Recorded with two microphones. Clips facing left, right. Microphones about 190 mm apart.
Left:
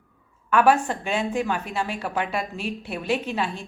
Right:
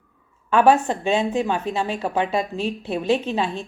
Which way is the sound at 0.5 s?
25° right (ahead or behind).